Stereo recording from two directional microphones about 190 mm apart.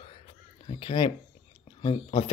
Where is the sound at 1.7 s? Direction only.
30° left (ahead or behind).